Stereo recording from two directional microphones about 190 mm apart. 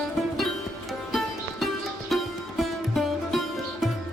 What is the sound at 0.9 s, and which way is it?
Music, centre (ahead or behind).